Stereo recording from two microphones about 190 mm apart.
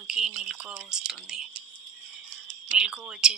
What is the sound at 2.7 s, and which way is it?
Speech, 5° right (ahead or behind).